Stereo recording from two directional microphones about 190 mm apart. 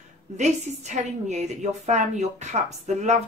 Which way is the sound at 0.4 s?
40° right (ahead or behind).